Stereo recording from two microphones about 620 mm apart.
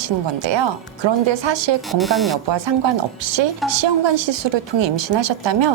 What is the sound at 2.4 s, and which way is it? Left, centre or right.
A woman's voice, right.